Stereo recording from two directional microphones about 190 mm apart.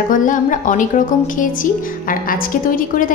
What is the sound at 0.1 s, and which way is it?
A woman's voice, 45° left (ahead or behind).